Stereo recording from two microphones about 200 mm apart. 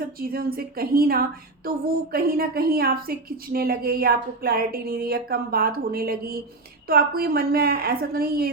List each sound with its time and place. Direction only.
0.2 s a woman's voice: 50° right (ahead or behind)